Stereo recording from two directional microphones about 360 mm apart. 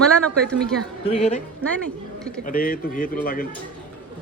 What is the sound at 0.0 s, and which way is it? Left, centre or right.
Speech, centre.